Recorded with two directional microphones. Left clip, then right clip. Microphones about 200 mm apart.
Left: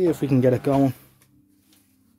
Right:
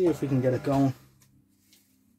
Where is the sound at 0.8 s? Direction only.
40° left (ahead or behind).